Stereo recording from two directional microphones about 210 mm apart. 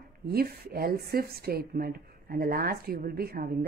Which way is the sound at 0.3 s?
45° right (ahead or behind).